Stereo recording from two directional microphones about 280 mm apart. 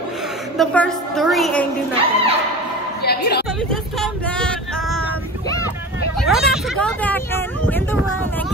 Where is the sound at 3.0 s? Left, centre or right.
Left.